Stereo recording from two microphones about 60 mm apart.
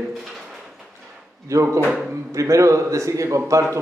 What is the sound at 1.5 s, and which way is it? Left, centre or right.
Speech, right.